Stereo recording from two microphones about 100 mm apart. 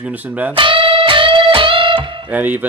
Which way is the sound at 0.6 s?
60° right (ahead or behind).